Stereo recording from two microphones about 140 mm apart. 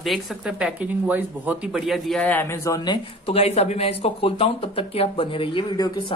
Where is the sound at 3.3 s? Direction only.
45° left (ahead or behind).